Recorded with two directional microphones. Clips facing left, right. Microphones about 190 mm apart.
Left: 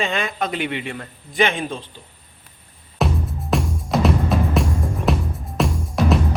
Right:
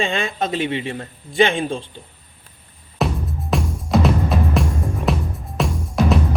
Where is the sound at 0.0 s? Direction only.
25° right (ahead or behind).